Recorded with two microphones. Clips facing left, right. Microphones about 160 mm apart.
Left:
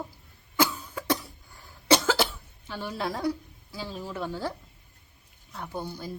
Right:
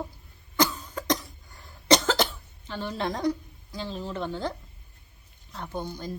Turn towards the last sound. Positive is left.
turn(degrees=10)  # may be behind; listen again after turning